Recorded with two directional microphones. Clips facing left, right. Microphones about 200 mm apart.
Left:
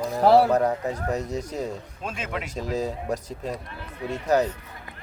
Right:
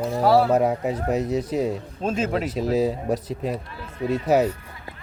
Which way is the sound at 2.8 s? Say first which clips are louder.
Right 5 dB; 5° right (ahead or behind).